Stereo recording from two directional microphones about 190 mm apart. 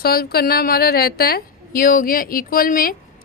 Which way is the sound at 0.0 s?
55° left (ahead or behind).